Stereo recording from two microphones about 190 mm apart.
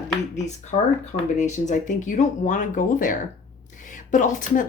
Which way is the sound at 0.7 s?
30° left (ahead or behind).